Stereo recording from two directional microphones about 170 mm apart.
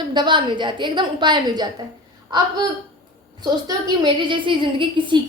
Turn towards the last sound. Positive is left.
turn(degrees=-30)  # may be behind; listen again after turning